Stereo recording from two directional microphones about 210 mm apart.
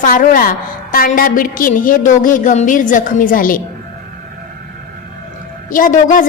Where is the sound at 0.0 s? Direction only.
40° left (ahead or behind).